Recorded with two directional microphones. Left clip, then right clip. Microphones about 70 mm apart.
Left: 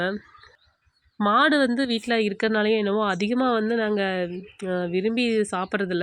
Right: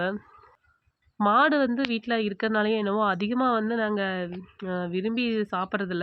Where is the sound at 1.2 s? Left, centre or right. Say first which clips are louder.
Left 2 dB; centre.